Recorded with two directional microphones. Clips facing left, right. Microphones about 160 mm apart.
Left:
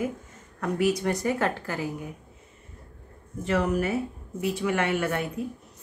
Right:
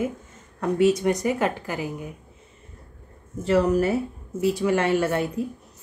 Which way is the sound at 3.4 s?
35° right (ahead or behind).